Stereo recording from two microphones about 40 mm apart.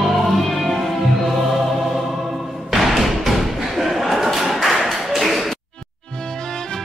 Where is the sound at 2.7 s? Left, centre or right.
Centre.